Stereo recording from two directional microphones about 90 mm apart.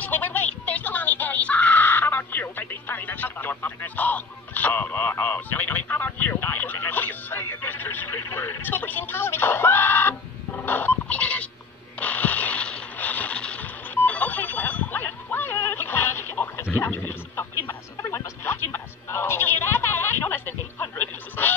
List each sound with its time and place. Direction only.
0.0 s music: 20° left (ahead or behind)
12.0 s a sound: 15° left (ahead or behind)
18.0 s music: 30° left (ahead or behind)